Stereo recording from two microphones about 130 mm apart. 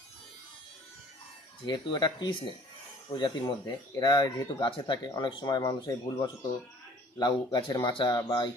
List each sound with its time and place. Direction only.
1.6 s speech: 35° left (ahead or behind)